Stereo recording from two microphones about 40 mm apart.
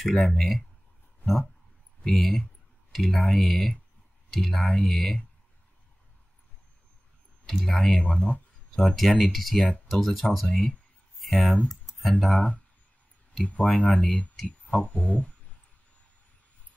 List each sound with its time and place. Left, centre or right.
0.0 s speech: centre
2.1 s speech: centre
7.6 s speech: centre
8.7 s speech: centre
13.6 s speech: left
14.9 s a sound: left